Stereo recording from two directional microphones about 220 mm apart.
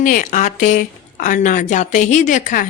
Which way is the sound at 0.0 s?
35° left (ahead or behind).